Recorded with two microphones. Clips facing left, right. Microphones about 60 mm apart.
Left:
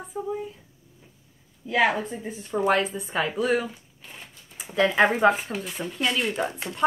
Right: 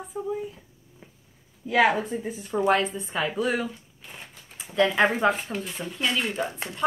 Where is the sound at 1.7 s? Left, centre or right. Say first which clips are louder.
Right 1 dB; centre.